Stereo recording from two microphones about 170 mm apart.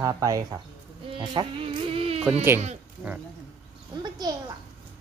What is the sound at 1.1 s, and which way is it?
Music, 30° right (ahead or behind).